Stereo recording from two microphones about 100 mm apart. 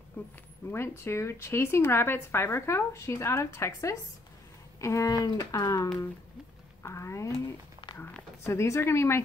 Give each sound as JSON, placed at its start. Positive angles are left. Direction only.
{"t": 0.2, "sound": "speech", "side_deg": 20}
{"t": 8.5, "sound": "speech", "side_deg": 30}